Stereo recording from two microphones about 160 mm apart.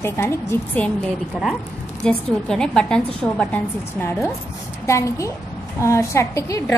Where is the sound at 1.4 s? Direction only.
5° right (ahead or behind).